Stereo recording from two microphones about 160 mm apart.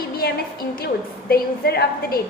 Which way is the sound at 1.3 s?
80° left.